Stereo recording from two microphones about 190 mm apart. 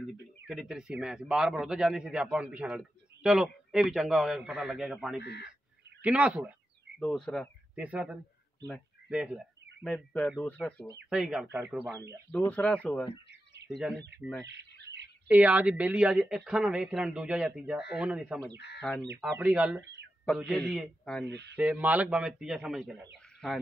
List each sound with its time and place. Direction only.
0.5 s a man's voice: 5° right (ahead or behind)
5.2 s speech: 60° left (ahead or behind)
6.0 s speech: 5° right (ahead or behind)
9.1 s a sound: 5° right (ahead or behind)
9.8 s a man's voice: 5° left (ahead or behind)
12.3 s speech: 5° left (ahead or behind)
14.4 s bird: 65° right (ahead or behind)
15.2 s a man's voice: 5° right (ahead or behind)
19.3 s a man's voice: 10° right (ahead or behind)
21.3 s speech: 65° right (ahead or behind)
21.5 s a man's voice: 10° right (ahead or behind)